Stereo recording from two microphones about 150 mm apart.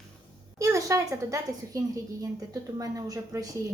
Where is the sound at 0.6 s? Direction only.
20° right (ahead or behind).